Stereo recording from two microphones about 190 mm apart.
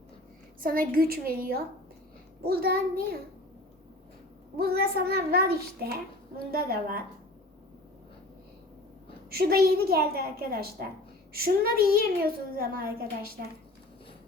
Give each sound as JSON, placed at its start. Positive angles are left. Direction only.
{"t": 0.6, "sound": "a child's voice", "side_deg": -50}
{"t": 4.5, "sound": "a child's voice", "side_deg": -55}
{"t": 9.3, "sound": "a woman's voice", "side_deg": -55}